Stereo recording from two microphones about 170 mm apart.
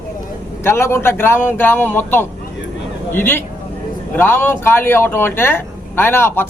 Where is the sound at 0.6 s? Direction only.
15° left (ahead or behind).